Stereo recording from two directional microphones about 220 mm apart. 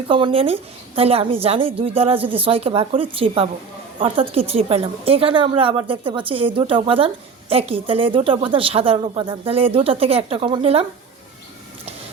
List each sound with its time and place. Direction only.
0.1 s a woman's voice: 25° right (ahead or behind)